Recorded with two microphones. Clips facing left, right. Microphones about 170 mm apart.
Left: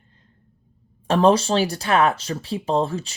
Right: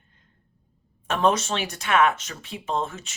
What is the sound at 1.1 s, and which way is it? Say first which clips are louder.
Speech: left 6 dB; 35° left (ahead or behind).